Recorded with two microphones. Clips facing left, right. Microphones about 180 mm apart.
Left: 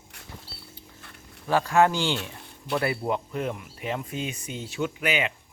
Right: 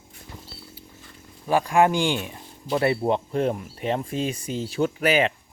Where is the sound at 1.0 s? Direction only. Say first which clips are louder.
Right 1 dB; 65° left (ahead or behind).